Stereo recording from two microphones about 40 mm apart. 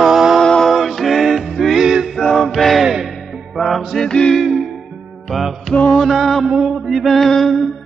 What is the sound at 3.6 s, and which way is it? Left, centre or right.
Music, centre.